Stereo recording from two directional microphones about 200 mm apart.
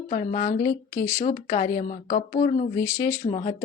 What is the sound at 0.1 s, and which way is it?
Speech, 40° left (ahead or behind).